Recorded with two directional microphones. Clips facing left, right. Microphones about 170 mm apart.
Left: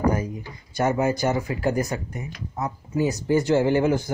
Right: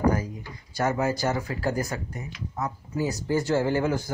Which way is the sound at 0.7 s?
20° left (ahead or behind).